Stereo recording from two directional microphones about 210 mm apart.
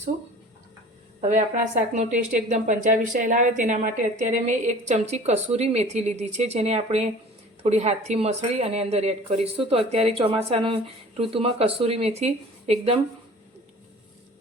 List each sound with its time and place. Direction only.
1.2 s a woman's voice: 35° right (ahead or behind)